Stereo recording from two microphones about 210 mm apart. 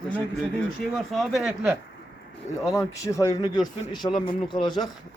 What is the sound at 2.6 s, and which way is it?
Speech, 15° left (ahead or behind).